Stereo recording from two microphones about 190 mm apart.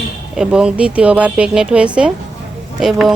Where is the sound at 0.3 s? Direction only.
5° right (ahead or behind).